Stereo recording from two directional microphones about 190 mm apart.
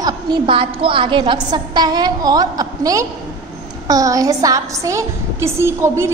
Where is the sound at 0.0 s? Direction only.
25° right (ahead or behind).